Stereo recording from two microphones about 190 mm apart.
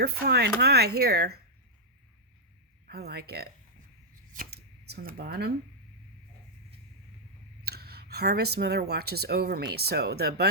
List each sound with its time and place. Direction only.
0.0 s speech: 55° right (ahead or behind)
2.8 s speech: 55° right (ahead or behind)
4.4 s a sound: 55° right (ahead or behind)
7.6 s speech: 55° right (ahead or behind)